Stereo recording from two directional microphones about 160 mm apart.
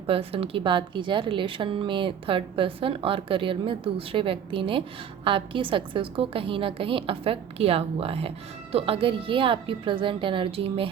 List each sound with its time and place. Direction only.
0.1 s a woman's voice: 35° right (ahead or behind)